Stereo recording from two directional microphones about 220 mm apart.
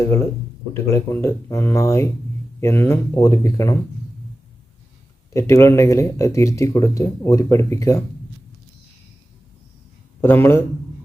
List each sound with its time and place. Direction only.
0.7 s speech: 10° left (ahead or behind)
5.3 s speech: 15° left (ahead or behind)
10.2 s speech: 10° left (ahead or behind)